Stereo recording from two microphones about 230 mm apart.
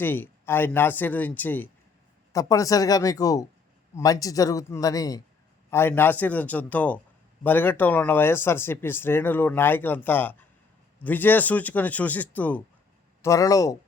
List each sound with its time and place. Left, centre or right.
0.0 s speech: centre